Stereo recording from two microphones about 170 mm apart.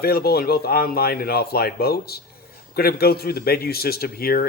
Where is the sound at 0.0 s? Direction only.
65° left (ahead or behind).